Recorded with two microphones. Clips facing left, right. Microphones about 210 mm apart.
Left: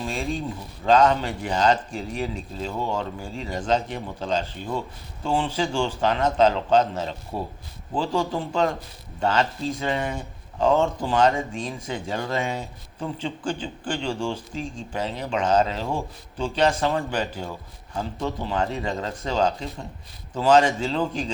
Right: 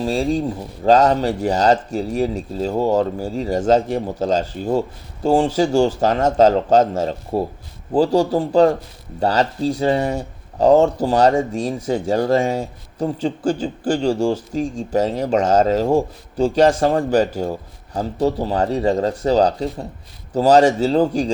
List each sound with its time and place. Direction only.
0.0 s speech: 35° right (ahead or behind)